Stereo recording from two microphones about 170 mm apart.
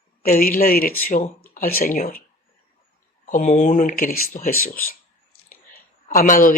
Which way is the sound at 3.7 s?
55° left (ahead or behind).